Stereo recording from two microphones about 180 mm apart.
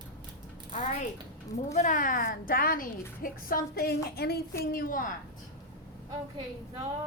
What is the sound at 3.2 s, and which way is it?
Music, 50° left (ahead or behind).